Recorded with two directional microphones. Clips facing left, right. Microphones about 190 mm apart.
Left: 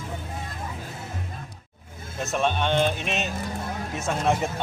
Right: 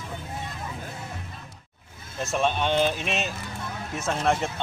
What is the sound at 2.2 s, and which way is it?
Speech, centre (ahead or behind).